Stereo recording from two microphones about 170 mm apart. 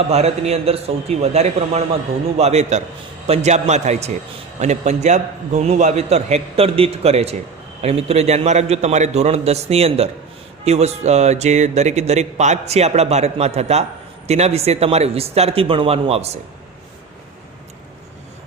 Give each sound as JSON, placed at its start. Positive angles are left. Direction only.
{"t": 0.1, "sound": "a man's voice", "side_deg": -40}